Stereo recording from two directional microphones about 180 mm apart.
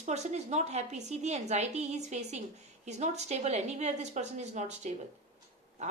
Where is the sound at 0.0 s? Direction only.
40° right (ahead or behind).